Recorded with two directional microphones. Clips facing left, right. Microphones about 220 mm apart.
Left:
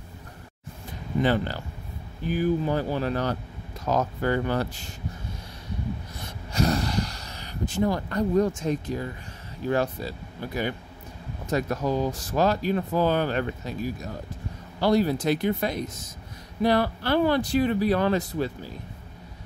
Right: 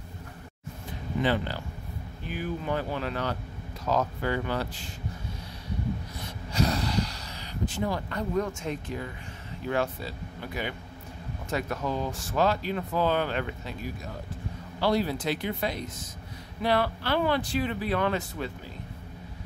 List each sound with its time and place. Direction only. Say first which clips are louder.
1.2 s speech: left 3 dB; 45° left (ahead or behind)
6.5 s gasp: left 2 dB; 45° left (ahead or behind)
9.7 s speech: left 4 dB; 40° left (ahead or behind)
14.8 s speech: left 4 dB; 45° left (ahead or behind)